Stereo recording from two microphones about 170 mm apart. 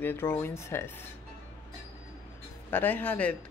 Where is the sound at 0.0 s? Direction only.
15° left (ahead or behind).